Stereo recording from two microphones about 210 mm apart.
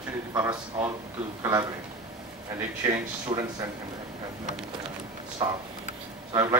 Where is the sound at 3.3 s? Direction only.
25° right (ahead or behind).